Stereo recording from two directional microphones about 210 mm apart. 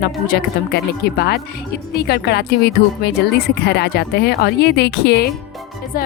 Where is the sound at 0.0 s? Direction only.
50° left (ahead or behind).